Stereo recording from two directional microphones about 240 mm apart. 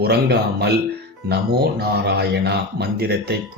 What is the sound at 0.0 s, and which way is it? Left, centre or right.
Speech, right.